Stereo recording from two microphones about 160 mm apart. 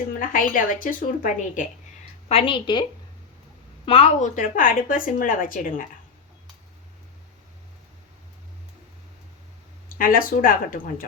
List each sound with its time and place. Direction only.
0.2 s a woman's voice: 60° left (ahead or behind)
2.3 s a woman's voice: 35° left (ahead or behind)
3.8 s a woman's voice: 40° left (ahead or behind); by 5.8 s 60° left (ahead or behind)
10.0 s a woman's voice: 60° left (ahead or behind)